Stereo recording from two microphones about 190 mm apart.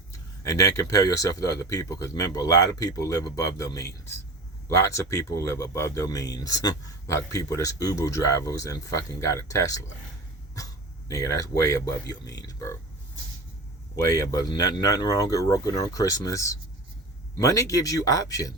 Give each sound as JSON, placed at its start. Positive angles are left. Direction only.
{"t": 0.4, "sound": "speech", "side_deg": 15}
{"t": 11.1, "sound": "speech", "side_deg": 15}
{"t": 14.0, "sound": "speech", "side_deg": 20}